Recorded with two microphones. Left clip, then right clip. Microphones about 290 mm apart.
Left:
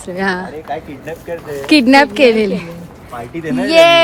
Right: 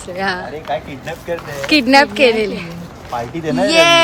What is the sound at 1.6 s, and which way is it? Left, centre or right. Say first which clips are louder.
Speech: left 2 dB; left.